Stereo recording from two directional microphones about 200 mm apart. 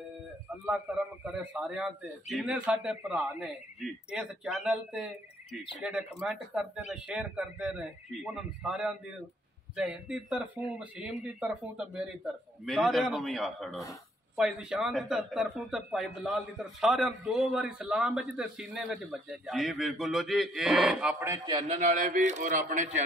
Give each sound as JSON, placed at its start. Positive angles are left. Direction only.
{"t": 0.7, "sound": "speech", "side_deg": -5}
{"t": 21.5, "sound": "a man's voice", "side_deg": -25}
{"t": 21.7, "sound": "a man's voice", "side_deg": -40}